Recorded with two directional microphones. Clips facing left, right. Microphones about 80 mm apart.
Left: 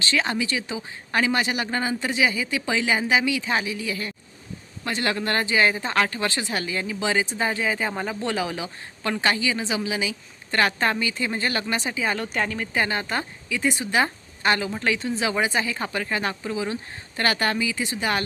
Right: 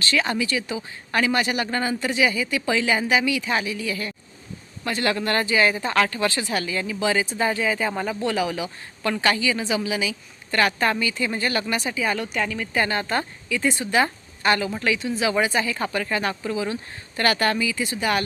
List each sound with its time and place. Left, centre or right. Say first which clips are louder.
0.0 s a woman's voice: right 1 dB; left
12.7 s a woman's voice: right 3 dB; left